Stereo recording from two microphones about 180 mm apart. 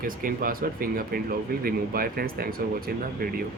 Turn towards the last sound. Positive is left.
turn(degrees=-55)  # may be behind; listen again after turning